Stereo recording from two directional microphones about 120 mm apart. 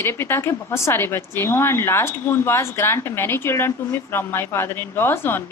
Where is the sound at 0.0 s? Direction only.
20° left (ahead or behind).